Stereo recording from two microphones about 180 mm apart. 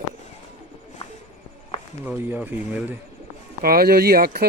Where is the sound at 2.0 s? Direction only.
10° right (ahead or behind).